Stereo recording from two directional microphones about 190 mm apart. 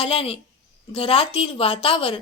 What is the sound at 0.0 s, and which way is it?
A woman's voice, 30° left (ahead or behind).